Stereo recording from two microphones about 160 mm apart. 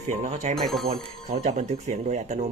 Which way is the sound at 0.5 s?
Centre (ahead or behind).